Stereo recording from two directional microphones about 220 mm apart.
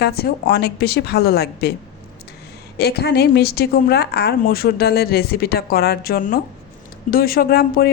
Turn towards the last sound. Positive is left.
turn(degrees=45)  # may be behind; listen again after turning